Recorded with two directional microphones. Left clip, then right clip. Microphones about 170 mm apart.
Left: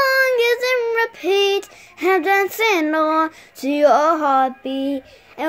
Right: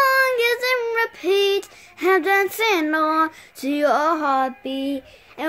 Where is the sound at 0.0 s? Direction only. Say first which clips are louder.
Left 1 dB; 10° right (ahead or behind).